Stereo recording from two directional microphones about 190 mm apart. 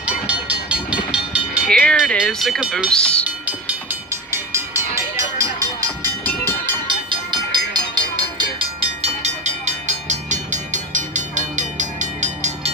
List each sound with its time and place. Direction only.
0.3 s train: 5° right (ahead or behind)
1.7 s speech: 5° left (ahead or behind)
4.1 s train: 15° right (ahead or behind)
7.1 s train: 20° right (ahead or behind); by 12.7 s 40° right (ahead or behind)